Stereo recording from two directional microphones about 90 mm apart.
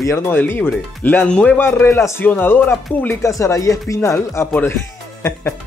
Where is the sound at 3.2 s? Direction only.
35° left (ahead or behind).